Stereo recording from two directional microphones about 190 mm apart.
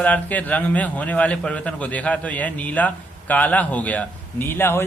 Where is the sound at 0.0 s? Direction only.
10° left (ahead or behind).